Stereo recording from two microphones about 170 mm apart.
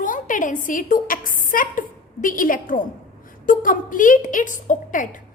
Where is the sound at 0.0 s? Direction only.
50° left (ahead or behind).